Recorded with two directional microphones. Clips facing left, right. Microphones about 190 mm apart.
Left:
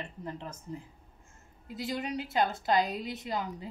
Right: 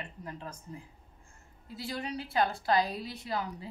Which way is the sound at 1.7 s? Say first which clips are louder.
Left 3 dB; 20° left (ahead or behind).